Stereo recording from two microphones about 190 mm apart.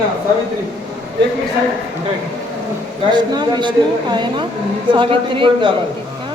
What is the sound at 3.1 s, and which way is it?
A man's voice, 20° right (ahead or behind).